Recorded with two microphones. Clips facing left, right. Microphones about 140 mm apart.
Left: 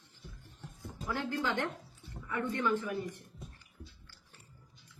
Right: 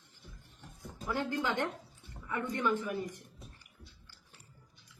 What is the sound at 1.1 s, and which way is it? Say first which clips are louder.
Speech: right 1 dB; 15° right (ahead or behind).